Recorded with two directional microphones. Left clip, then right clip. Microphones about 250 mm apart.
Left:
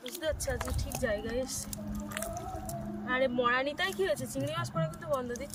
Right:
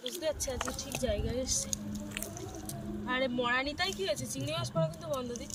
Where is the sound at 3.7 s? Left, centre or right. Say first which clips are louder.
Left 1 dB; left.